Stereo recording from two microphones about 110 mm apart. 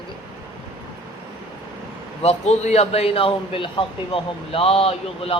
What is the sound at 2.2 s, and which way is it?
Speech, 80° left.